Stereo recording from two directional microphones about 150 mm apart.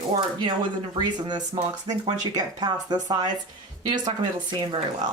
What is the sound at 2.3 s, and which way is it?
Speech, 25° right (ahead or behind).